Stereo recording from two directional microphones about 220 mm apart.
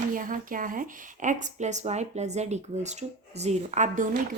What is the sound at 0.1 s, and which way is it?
A woman's voice, 40° right (ahead or behind).